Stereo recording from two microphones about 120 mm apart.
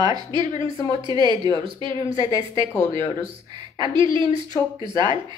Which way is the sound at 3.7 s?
40° right (ahead or behind).